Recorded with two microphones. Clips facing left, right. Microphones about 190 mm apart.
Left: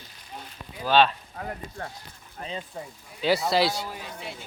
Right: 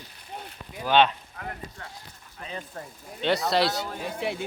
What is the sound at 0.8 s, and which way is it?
Speech, 20° right (ahead or behind).